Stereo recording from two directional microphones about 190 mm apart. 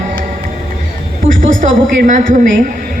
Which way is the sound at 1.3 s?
40° right (ahead or behind).